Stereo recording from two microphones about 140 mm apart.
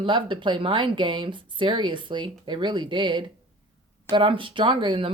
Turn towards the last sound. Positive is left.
turn(degrees=-35)  # may be behind; listen again after turning